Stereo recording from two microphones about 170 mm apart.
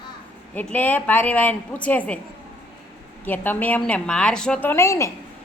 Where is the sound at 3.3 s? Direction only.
10° left (ahead or behind).